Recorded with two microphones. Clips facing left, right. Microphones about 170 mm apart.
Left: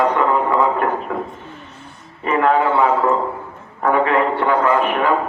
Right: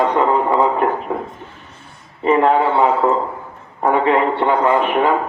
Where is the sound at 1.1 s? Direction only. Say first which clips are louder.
Right 1 dB; 25° right (ahead or behind).